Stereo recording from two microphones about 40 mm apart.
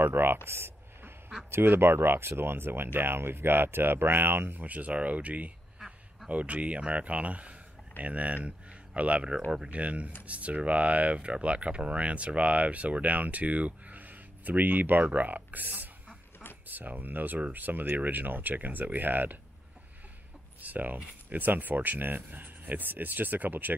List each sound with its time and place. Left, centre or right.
0.0 s speech: right
0.5 s a sound: right
1.5 s speech: right
20.6 s speech: right